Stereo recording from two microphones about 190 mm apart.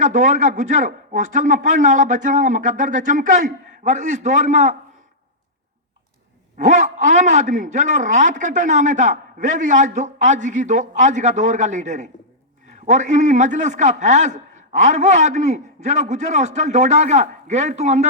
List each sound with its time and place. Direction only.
0.0 s a man's voice: 45° right (ahead or behind)
6.7 s a man's voice: 40° right (ahead or behind)